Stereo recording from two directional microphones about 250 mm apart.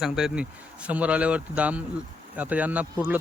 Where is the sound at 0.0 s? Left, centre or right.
Centre.